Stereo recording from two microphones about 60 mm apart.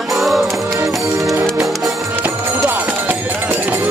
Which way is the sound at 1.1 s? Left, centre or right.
Right.